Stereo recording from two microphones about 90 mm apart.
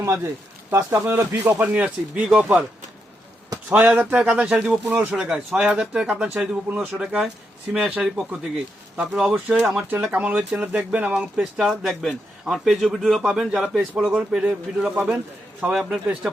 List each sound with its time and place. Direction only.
0.0 s speech: 30° right (ahead or behind)
1.6 s speech: 15° right (ahead or behind)
3.8 s speech: 15° right (ahead or behind)
9.3 s speech: 15° right (ahead or behind)